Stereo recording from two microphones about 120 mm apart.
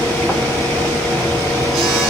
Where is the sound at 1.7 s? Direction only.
Centre (ahead or behind).